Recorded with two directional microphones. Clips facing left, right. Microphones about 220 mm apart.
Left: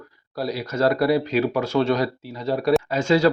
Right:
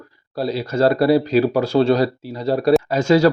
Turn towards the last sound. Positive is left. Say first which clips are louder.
# right 4 dB
turn(degrees=-45)  # may be behind; listen again after turning